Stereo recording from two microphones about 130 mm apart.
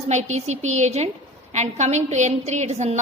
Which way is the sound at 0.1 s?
60° right (ahead or behind).